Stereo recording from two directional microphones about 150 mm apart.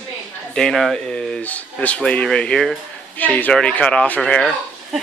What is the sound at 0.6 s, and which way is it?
Speech, centre (ahead or behind).